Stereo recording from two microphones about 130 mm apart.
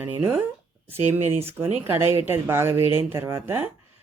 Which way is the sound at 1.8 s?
20° right (ahead or behind).